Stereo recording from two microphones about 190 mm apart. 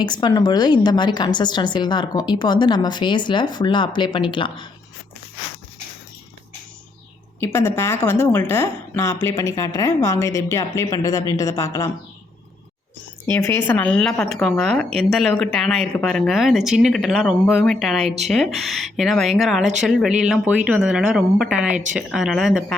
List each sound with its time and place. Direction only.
0.0 s a woman's voice: 25° left (ahead or behind)
7.3 s a woman's voice: 15° left (ahead or behind)
13.4 s speech: 10° left (ahead or behind)